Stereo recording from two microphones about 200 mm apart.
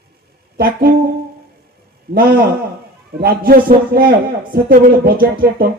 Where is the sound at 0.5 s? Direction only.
50° right (ahead or behind).